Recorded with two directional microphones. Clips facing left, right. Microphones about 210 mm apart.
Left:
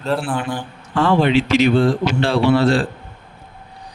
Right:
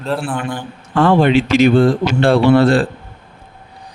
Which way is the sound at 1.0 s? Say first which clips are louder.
Right 3 dB; 50° right (ahead or behind).